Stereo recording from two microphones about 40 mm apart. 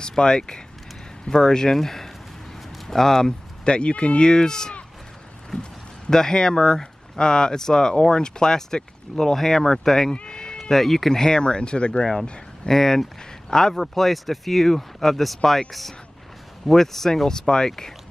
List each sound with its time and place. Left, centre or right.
0.1 s speech: centre
3.6 s speech: left
10.2 s a sound: centre
10.6 s speech: centre; by 12.1 s left
12.6 s speech: centre
13.7 s speech: centre
16.6 s speech: centre